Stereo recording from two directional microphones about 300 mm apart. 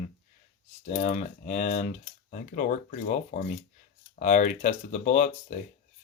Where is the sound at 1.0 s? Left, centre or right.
Left.